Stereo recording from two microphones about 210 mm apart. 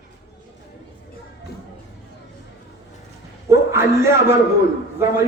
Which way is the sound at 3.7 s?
15° right (ahead or behind).